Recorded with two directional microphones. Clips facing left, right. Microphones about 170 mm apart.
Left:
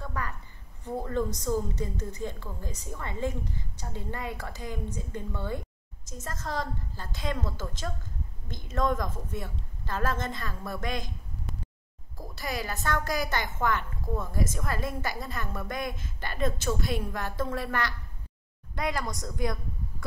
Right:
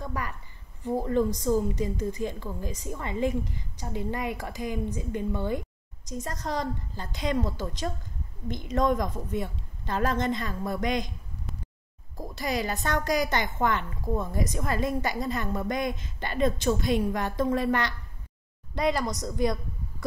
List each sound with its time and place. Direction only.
0.0 s a woman's voice: 15° right (ahead or behind)
12.4 s a woman's voice: 20° right (ahead or behind)